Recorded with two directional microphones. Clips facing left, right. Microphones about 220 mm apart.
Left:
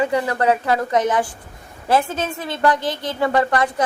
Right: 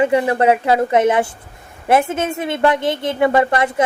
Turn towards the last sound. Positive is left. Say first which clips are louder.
# right 3 dB
turn(degrees=-20)  # may be behind; listen again after turning